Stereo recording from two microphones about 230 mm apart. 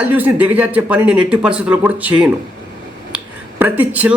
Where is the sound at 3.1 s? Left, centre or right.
Centre.